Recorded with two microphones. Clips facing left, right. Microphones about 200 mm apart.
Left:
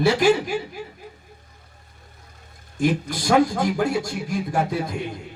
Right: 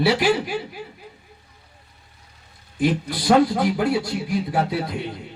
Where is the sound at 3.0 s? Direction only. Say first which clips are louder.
Right 3 dB; 45° left (ahead or behind).